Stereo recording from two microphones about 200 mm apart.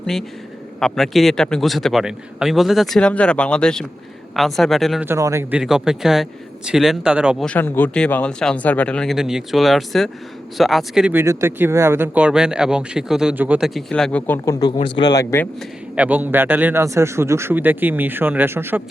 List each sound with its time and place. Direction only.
0.8 s speech: centre (ahead or behind)
5.0 s speech: 15° right (ahead or behind)
7.4 s speech: 10° left (ahead or behind)
14.7 s speech: 25° left (ahead or behind)
16.0 s speech: 10° right (ahead or behind)